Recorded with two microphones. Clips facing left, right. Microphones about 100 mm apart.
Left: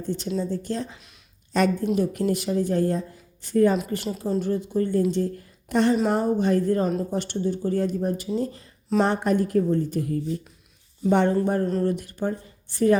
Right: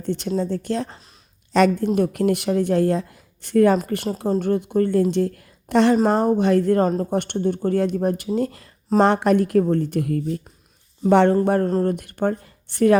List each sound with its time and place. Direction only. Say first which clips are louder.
0.0 s speech: right 4 dB; 70° right (ahead or behind)
1.5 s a woman's voice: right 5 dB; 90° right
2.0 s speech: right 4 dB; 65° right (ahead or behind)
3.8 s a woman's voice: right 3 dB; 55° right (ahead or behind); by 6.8 s 75° right (ahead or behind)
7.0 s speech: right 4 dB; 60° right (ahead or behind)
11.1 s a woman's voice: right 5 dB; 90° right
11.4 s speech: right 4 dB; 70° right (ahead or behind)
11.7 s speech: right 3 dB; 45° right (ahead or behind); by 13.0 s 70° right (ahead or behind)